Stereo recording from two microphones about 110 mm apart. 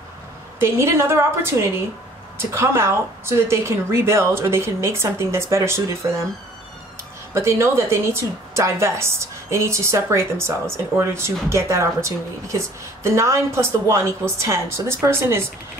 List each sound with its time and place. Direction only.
0.6 s a woman's voice: 25° right (ahead or behind)
7.3 s a woman's voice: 25° right (ahead or behind)